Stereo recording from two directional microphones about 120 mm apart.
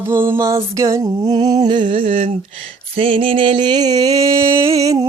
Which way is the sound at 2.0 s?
90° right.